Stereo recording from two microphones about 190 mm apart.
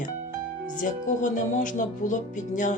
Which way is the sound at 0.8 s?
40° left (ahead or behind).